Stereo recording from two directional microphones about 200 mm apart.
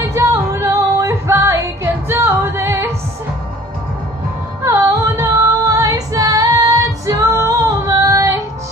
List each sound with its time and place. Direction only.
0.1 s music: 15° right (ahead or behind)
4.6 s female singing: 15° right (ahead or behind)